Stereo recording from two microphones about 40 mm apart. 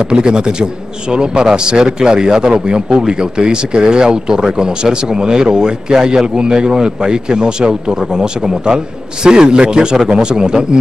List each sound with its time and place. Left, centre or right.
0.0 s a man's voice: right